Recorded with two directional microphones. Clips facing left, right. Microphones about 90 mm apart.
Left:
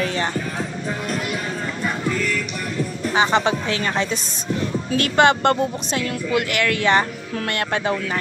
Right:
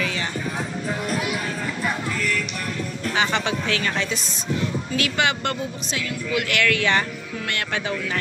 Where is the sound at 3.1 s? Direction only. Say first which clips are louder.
Left 5 dB; 30° left (ahead or behind).